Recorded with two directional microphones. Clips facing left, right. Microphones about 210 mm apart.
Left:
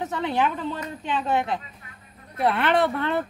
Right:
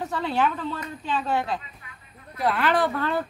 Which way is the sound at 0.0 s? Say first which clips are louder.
Even; 20° left (ahead or behind).